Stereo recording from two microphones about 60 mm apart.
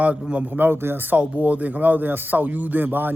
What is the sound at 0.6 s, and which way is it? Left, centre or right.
A man's voice, right.